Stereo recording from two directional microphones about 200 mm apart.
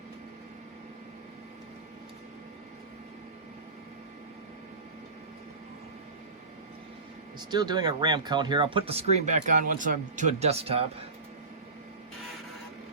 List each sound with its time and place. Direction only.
7.3 s speech: 20° right (ahead or behind)